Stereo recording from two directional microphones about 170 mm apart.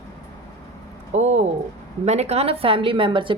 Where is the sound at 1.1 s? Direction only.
45° right (ahead or behind).